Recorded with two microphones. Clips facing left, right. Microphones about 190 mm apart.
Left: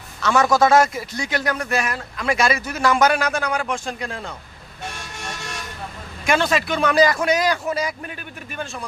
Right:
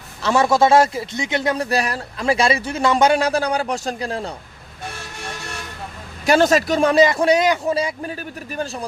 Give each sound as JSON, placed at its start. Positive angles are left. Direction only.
{"t": 0.2, "sound": "a man's voice", "side_deg": -30}
{"t": 6.2, "sound": "a man's voice", "side_deg": -40}
{"t": 6.9, "sound": "a man's voice", "side_deg": -25}